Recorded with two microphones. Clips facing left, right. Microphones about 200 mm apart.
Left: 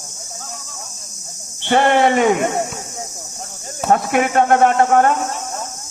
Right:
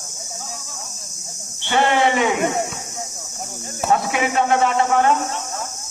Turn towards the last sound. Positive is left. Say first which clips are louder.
# left 3 dB
turn(degrees=50)  # may be behind; listen again after turning